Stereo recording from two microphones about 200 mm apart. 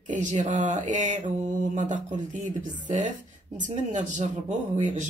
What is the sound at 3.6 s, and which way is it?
Speech, 40° right (ahead or behind).